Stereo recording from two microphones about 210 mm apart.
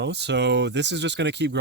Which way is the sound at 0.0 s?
55° right (ahead or behind).